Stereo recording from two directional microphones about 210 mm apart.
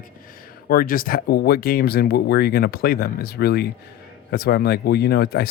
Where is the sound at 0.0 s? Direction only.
40° left (ahead or behind).